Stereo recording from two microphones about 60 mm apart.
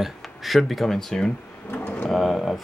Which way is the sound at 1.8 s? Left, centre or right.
Left.